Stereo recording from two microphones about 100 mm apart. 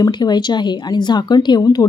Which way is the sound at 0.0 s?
45° left (ahead or behind).